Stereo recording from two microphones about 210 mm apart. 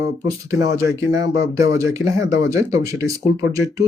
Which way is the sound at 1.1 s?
15° right (ahead or behind).